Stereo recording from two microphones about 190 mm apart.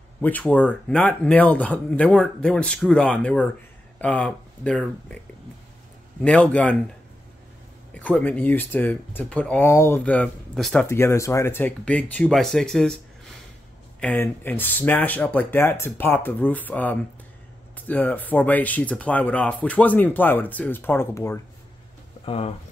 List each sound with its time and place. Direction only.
0.2 s speech: 10° left (ahead or behind)
6.2 s speech: 5° left (ahead or behind)
7.9 s speech: 5° left (ahead or behind)
22.2 s speech: 30° left (ahead or behind)